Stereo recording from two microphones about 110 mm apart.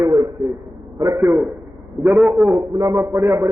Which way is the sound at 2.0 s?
10° right (ahead or behind).